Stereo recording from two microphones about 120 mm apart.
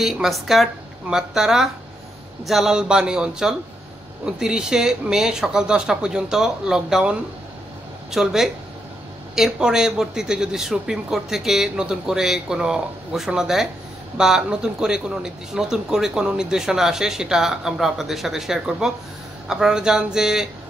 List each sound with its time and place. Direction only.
0.0 s speech: centre (ahead or behind)